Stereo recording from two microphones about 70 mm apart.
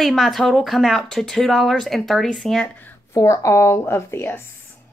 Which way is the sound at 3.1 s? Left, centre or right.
Left.